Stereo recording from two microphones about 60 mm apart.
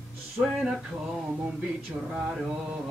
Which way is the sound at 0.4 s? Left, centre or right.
Centre.